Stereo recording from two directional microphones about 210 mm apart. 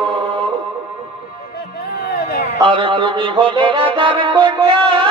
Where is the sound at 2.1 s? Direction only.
45° left (ahead or behind).